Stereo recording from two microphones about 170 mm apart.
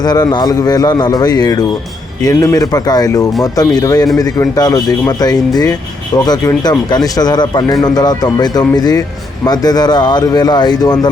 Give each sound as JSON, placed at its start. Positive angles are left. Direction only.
{"t": 0.0, "sound": "speech", "side_deg": 25}